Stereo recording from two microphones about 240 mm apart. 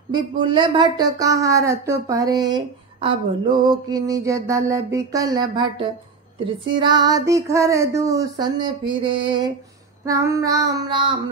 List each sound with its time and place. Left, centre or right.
0.1 s speech: centre